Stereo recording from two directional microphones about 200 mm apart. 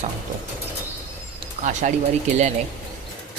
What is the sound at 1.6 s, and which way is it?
Speech, 40° right (ahead or behind).